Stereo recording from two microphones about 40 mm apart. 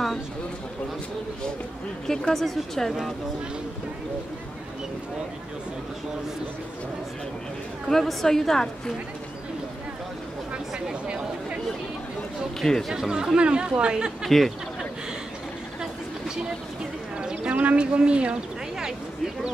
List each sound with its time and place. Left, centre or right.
2.3 s speech: centre
7.9 s a woman's voice: centre
12.5 s a woman's voice: centre
13.1 s speech: centre
14.2 s speech: centre
15.8 s vehicle: centre
17.2 s speech: right